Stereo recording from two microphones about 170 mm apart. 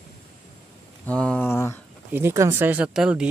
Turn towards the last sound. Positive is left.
turn(degrees=-5)  # may be behind; listen again after turning